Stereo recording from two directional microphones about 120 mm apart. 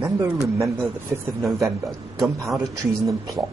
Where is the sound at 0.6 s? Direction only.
25° right (ahead or behind).